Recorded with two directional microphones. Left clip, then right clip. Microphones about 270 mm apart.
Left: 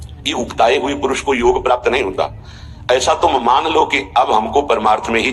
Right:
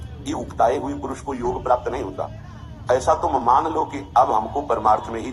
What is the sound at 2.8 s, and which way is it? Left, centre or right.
A man's voice, left.